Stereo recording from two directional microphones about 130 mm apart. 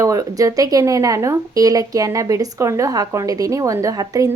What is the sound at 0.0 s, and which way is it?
Speech, 25° right (ahead or behind).